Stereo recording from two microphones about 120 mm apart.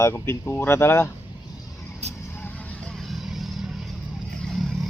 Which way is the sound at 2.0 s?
65° right (ahead or behind).